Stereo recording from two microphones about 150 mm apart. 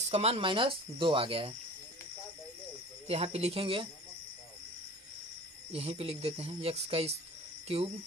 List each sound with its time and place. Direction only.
0.1 s speech: 40° right (ahead or behind)
3.1 s speech: 45° right (ahead or behind)
5.7 s speech: 40° right (ahead or behind)